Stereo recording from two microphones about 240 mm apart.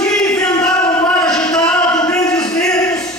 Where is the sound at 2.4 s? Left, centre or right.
Centre.